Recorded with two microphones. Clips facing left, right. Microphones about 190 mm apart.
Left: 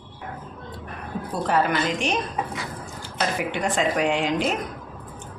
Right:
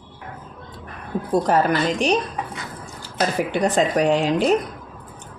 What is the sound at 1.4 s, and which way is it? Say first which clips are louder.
Speech: right 1 dB; 40° right (ahead or behind).